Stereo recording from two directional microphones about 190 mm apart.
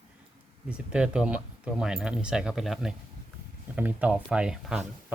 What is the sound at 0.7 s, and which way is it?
Speech, 5° right (ahead or behind).